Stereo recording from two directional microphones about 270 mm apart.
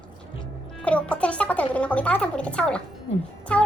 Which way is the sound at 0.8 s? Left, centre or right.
Centre.